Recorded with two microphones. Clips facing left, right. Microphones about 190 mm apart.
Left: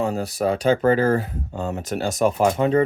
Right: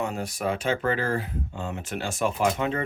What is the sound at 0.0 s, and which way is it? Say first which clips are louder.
Speech: left 6 dB; 35° left (ahead or behind).